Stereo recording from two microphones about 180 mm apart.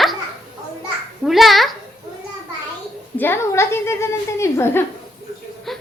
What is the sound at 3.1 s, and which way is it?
Speech, 10° left (ahead or behind).